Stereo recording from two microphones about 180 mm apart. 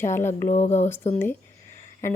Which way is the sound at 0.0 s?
15° left (ahead or behind).